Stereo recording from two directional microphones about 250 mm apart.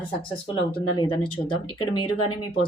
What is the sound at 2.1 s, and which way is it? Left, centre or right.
Speech, left.